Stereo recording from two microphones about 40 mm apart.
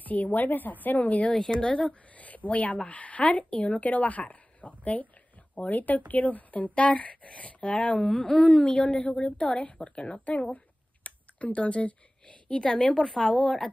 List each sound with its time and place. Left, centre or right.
0.0 s speech: left
1.6 s a woman's voice: left
9.8 s a woman's voice: left
11.1 s speech: left